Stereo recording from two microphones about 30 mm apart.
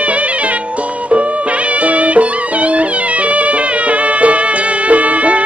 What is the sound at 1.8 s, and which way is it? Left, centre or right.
Music, right.